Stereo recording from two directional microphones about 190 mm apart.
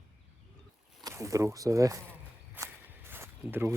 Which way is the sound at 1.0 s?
15° right (ahead or behind).